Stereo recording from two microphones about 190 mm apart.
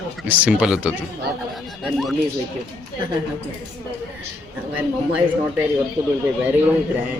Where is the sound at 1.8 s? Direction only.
Centre (ahead or behind).